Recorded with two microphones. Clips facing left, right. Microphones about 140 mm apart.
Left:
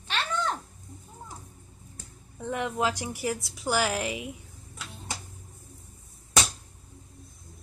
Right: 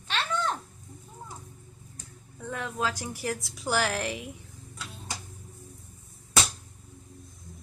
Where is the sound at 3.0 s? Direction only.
10° left (ahead or behind).